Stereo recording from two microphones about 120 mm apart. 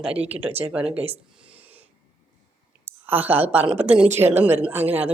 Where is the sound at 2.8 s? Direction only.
15° right (ahead or behind).